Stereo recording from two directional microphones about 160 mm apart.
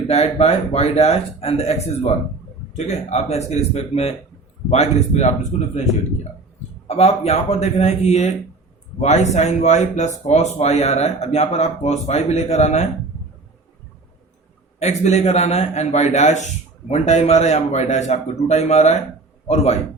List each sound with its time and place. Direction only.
0.1 s speech: 40° left (ahead or behind)
6.8 s speech: 40° left (ahead or behind)
14.8 s speech: 45° left (ahead or behind)